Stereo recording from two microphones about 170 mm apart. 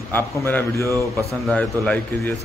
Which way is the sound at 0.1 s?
10° left (ahead or behind).